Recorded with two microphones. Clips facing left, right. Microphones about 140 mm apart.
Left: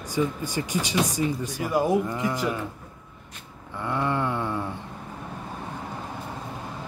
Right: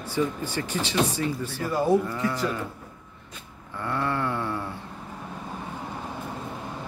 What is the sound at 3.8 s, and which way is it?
Speech, 15° left (ahead or behind).